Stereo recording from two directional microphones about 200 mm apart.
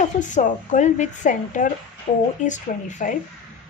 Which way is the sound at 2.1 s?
30° left (ahead or behind).